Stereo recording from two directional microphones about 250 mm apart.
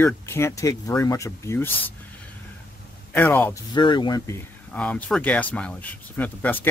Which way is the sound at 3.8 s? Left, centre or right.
Centre.